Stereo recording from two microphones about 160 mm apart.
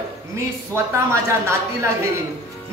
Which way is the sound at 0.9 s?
15° right (ahead or behind).